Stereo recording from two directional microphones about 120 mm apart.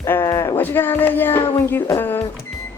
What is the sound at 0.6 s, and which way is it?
Music, 15° left (ahead or behind).